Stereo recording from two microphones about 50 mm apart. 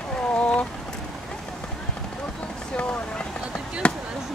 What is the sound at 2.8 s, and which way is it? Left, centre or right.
Vehicle, left.